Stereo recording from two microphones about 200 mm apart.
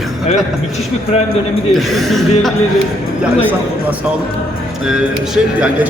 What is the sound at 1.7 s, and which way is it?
A man's voice, centre (ahead or behind).